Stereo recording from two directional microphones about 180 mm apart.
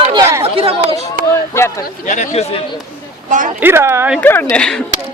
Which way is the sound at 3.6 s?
15° right (ahead or behind).